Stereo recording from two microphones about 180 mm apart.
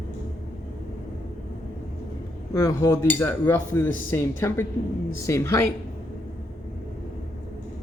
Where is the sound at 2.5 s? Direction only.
15° left (ahead or behind).